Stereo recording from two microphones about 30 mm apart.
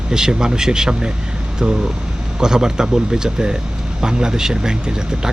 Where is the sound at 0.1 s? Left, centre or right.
Right.